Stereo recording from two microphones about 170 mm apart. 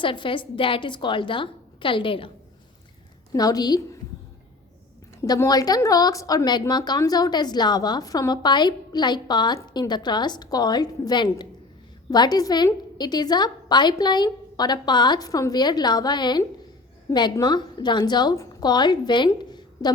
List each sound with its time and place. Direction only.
0.0 s a woman's voice: 30° left (ahead or behind)
3.3 s a woman's voice: 20° left (ahead or behind)
5.2 s a woman's voice: 20° left (ahead or behind)